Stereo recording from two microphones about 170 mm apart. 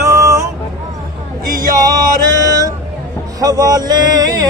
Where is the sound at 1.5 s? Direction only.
55° right (ahead or behind).